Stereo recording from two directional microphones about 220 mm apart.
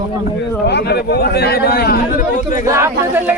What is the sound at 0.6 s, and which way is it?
Speech, 50° left (ahead or behind).